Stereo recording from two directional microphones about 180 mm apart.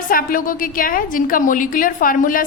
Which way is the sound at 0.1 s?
50° left (ahead or behind).